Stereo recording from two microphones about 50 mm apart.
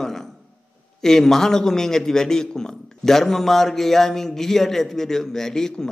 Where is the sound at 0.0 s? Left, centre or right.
Centre.